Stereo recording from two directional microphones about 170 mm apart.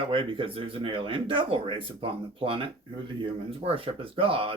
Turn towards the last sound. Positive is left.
turn(degrees=-30)  # may be behind; listen again after turning